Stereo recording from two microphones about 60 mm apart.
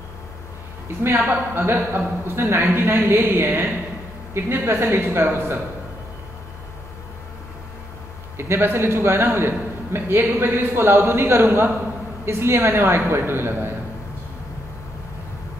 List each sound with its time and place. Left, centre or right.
1.0 s a man's voice: right
8.4 s a man's voice: right